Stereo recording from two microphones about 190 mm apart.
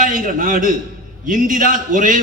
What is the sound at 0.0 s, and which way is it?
A man's voice, 45° right (ahead or behind).